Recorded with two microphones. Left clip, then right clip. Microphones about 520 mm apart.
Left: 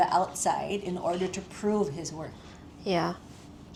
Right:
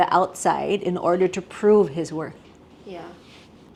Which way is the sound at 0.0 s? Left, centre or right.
Right.